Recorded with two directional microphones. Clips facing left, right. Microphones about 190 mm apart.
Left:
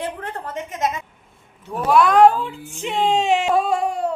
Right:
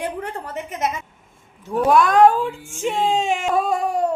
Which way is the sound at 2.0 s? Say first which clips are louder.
Left 2 dB; 50° right (ahead or behind).